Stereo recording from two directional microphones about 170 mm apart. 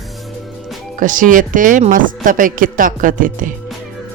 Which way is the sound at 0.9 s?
50° right (ahead or behind).